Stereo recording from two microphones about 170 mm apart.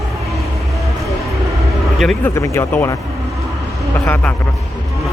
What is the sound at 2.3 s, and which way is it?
Speech, 15° left (ahead or behind).